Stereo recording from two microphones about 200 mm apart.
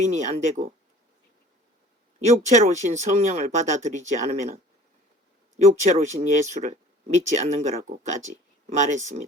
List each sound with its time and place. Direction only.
0.0 s speech: 35° right (ahead or behind)
2.2 s speech: 35° right (ahead or behind)